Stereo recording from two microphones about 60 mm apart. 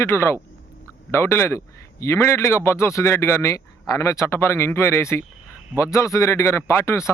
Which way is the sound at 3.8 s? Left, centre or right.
Left.